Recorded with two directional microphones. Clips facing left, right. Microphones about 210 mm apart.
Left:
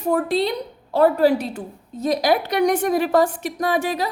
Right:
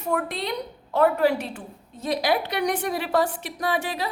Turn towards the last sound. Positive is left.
turn(degrees=45)  # may be behind; listen again after turning